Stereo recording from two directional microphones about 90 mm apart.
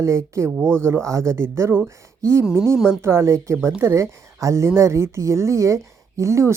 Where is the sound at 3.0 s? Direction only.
30° right (ahead or behind).